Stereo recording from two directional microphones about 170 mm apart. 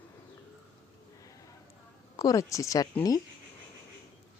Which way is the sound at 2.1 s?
20° left (ahead or behind).